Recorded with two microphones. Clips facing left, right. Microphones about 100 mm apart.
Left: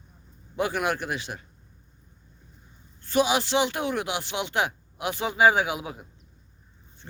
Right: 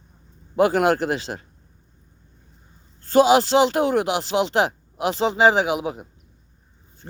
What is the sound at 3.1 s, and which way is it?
Speech, 40° right (ahead or behind).